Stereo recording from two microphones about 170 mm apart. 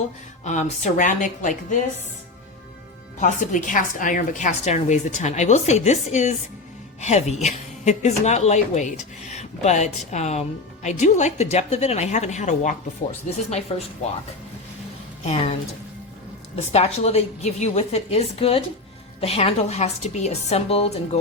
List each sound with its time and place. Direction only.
0.4 s a woman's voice: 45° left (ahead or behind)
3.2 s a woman's voice: 45° left (ahead or behind)
15.2 s a woman's voice: 35° left (ahead or behind)
16.6 s a woman's voice: 40° left (ahead or behind)